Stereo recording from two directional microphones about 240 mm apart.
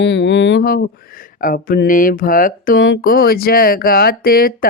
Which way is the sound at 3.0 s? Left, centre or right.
Left.